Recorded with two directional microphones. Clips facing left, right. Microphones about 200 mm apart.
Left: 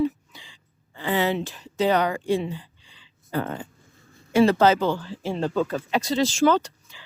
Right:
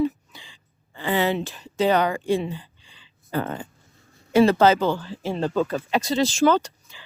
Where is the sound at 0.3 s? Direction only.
30° right (ahead or behind).